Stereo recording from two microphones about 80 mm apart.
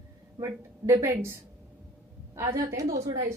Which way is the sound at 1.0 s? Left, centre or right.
Right.